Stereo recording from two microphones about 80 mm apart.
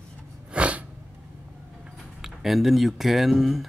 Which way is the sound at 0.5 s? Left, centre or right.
Centre.